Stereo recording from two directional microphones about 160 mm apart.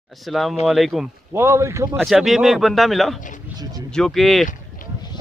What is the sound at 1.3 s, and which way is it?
Speech, 15° right (ahead or behind).